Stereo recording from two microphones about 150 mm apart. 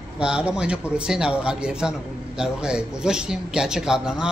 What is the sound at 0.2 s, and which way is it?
A man's voice, 5° right (ahead or behind).